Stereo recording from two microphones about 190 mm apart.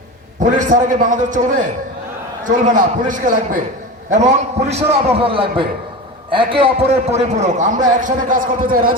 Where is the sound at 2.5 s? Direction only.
45° right (ahead or behind).